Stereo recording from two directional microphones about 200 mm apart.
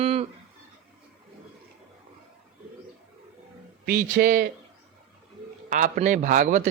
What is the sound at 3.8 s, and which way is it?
Speech, 50° right (ahead or behind).